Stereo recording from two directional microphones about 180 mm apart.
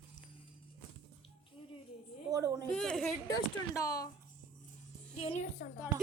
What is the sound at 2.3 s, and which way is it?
Speech, 20° right (ahead or behind).